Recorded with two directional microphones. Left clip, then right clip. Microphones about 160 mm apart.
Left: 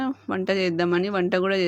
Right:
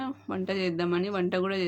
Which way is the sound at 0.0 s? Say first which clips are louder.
Left 7 dB; 40° left (ahead or behind).